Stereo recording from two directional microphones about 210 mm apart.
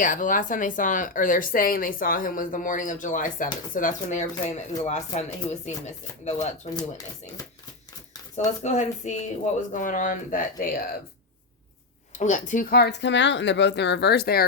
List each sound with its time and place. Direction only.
0.0 s speech: 40° left (ahead or behind)
6.7 s speech: 15° left (ahead or behind)
8.4 s speech: 35° left (ahead or behind)
12.1 s speech: 35° left (ahead or behind)